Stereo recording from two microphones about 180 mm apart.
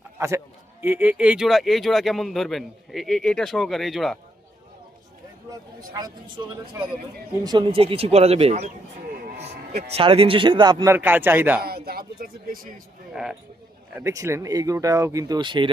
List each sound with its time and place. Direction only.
0.2 s a man's voice: 15° right (ahead or behind)
5.5 s speech: 20° right (ahead or behind)
7.4 s speech: 25° right (ahead or behind)
9.9 s speech: 30° right (ahead or behind)
10.9 s speech: 10° right (ahead or behind)
11.6 s speech: 60° right (ahead or behind)
13.9 s speech: 15° right (ahead or behind)